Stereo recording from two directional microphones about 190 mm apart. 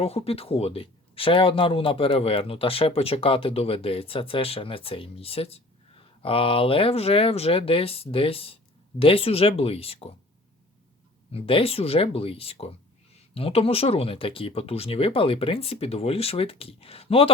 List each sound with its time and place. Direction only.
0.0 s speech: 30° left (ahead or behind)
11.3 s speech: 30° left (ahead or behind)